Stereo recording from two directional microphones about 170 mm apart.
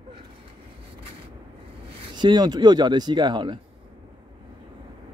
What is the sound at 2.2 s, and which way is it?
Speech, 25° right (ahead or behind).